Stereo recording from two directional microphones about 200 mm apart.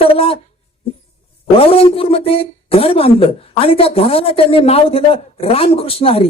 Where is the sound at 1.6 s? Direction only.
30° left (ahead or behind).